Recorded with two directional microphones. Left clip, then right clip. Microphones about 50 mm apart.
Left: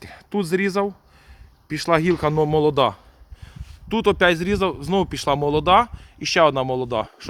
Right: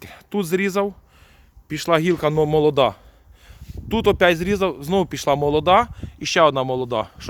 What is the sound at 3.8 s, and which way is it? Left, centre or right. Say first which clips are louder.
Speech: right 1 dB; right.